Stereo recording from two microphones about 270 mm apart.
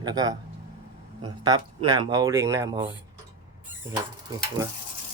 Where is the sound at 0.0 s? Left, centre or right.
Centre.